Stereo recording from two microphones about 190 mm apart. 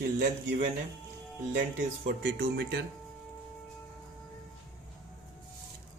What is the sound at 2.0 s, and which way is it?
Speech, 55° right (ahead or behind).